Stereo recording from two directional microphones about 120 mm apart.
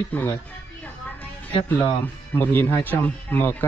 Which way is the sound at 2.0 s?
15° left (ahead or behind).